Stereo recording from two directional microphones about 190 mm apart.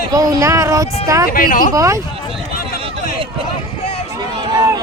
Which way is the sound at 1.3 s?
45° left (ahead or behind).